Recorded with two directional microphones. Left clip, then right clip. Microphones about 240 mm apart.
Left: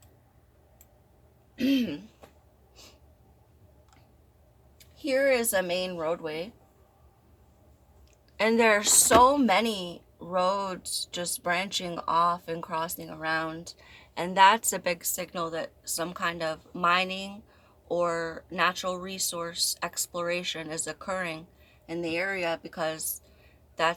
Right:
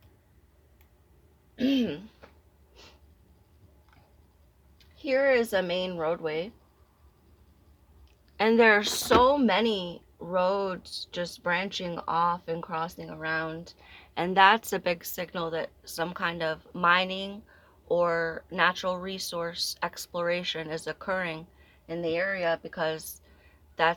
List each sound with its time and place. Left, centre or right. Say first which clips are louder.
1.5 s throat clearing: even; centre
4.9 s speech: right 1 dB; right
8.4 s speech: right 2 dB; centre